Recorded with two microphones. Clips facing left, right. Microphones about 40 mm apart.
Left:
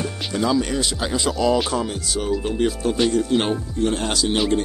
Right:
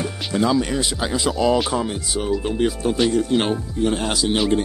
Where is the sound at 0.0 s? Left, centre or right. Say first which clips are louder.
Right 2 dB; centre.